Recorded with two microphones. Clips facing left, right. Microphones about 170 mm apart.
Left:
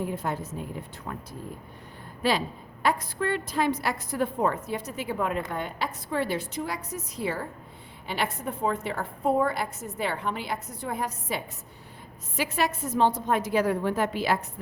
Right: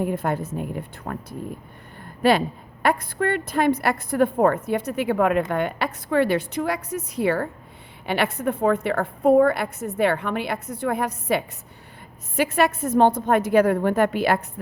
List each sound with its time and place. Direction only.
0.0 s a woman's voice: 60° right (ahead or behind)
12.4 s a woman's voice: 55° right (ahead or behind)